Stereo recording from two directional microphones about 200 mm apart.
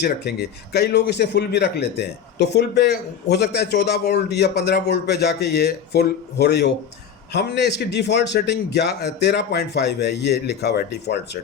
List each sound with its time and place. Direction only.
0.0 s a man's voice: 55° left (ahead or behind)